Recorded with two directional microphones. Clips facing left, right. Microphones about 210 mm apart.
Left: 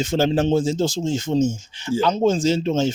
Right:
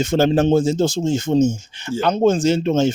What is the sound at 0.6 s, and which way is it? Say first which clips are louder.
Speech: right 3 dB; 65° right (ahead or behind).